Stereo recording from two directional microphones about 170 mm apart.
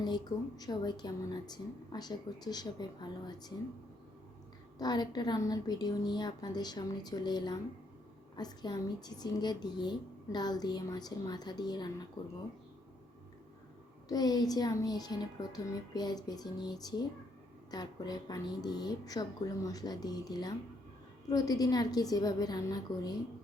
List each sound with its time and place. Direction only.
0.0 s speech: 25° left (ahead or behind)
4.8 s speech: 25° left (ahead or behind)
14.1 s speech: 25° left (ahead or behind)